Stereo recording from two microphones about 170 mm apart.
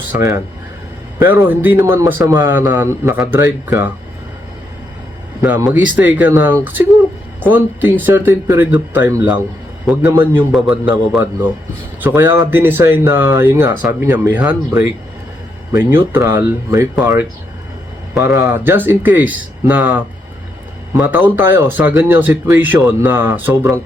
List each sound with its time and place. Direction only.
0.1 s speech: 15° right (ahead or behind)
5.4 s speech: 15° right (ahead or behind)
18.1 s speech: 15° right (ahead or behind)